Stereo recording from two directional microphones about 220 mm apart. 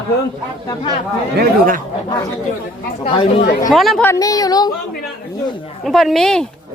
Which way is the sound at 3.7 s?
Centre (ahead or behind).